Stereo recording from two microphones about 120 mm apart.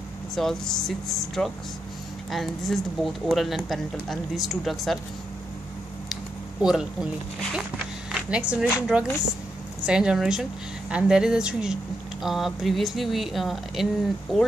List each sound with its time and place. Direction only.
0.4 s speech: 5° left (ahead or behind)
6.6 s speech: 5° right (ahead or behind)